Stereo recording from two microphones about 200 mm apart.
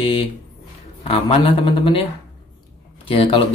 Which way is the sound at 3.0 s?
25° left (ahead or behind).